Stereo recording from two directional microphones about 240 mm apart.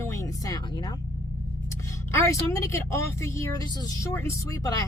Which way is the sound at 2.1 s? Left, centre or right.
Centre.